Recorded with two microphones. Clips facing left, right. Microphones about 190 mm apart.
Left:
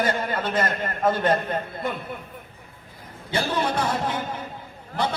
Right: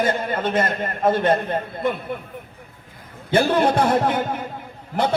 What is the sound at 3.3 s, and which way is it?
A man's voice, 60° right (ahead or behind).